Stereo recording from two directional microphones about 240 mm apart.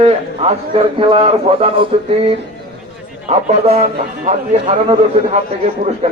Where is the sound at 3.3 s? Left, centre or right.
Right.